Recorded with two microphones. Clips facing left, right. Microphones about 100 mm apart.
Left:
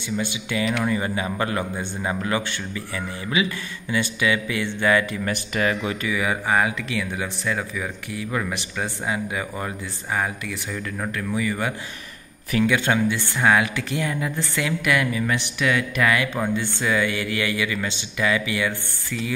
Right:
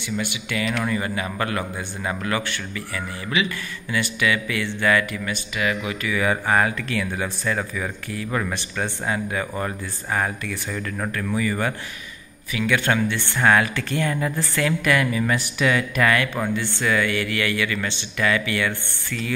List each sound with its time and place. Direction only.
0.2 s a man's voice: 20° left (ahead or behind)
5.2 s speech: 40° left (ahead or behind)
6.0 s speech: 10° left (ahead or behind)
12.6 s speech: 15° left (ahead or behind); by 16.1 s centre (ahead or behind)
16.1 s speech: 10° left (ahead or behind)